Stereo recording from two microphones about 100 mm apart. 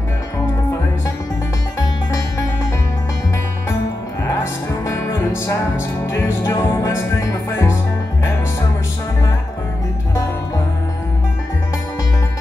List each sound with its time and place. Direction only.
4.4 s music: 25° left (ahead or behind)